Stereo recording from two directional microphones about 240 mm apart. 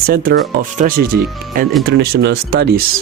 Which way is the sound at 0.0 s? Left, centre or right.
Right.